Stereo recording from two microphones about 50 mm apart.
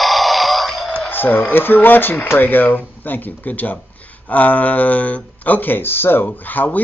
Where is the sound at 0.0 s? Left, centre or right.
Centre.